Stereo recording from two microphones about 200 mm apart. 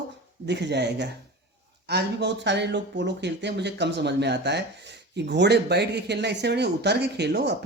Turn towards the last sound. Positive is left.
turn(degrees=-55)  # may be behind; listen again after turning